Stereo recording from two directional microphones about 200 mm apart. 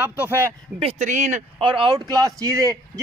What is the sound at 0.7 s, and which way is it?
Speech, 30° right (ahead or behind).